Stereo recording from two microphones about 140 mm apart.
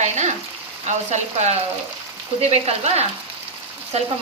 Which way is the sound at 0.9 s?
55° right (ahead or behind).